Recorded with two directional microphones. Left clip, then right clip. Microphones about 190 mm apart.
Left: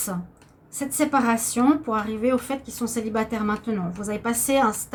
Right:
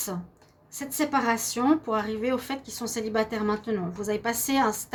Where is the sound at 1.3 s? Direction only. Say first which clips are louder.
Left 3 dB; 45° right (ahead or behind).